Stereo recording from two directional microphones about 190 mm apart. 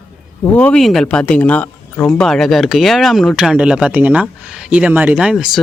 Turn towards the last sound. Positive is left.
turn(degrees=0)  # may be behind; listen again after turning